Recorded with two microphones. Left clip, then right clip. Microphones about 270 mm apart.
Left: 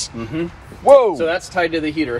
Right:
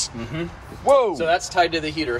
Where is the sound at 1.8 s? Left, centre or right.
Centre.